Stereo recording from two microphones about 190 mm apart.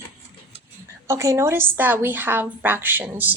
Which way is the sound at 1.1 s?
15° right (ahead or behind).